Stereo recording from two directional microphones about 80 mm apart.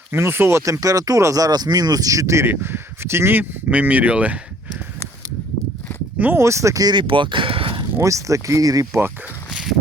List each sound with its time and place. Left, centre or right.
0.1 s speech: right
0.6 s speech: right
3.7 s speech: centre
6.1 s speech: right
6.4 s speech: right
6.8 s speech: right
7.9 s speech: right